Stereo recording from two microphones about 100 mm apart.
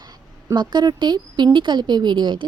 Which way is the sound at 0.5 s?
45° right (ahead or behind).